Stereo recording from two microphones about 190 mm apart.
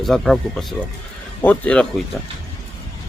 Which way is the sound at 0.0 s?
Centre (ahead or behind).